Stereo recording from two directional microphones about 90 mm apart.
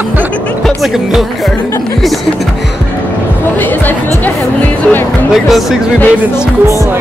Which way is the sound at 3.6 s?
20° left (ahead or behind).